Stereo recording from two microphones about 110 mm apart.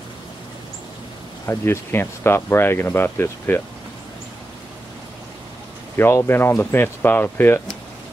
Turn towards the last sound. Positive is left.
turn(degrees=20)  # may be behind; listen again after turning